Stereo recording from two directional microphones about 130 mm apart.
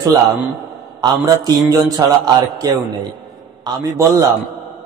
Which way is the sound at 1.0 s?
30° right (ahead or behind).